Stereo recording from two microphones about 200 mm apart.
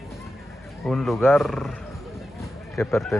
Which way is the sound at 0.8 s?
Centre (ahead or behind).